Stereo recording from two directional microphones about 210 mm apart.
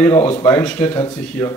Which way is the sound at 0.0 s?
10° left (ahead or behind).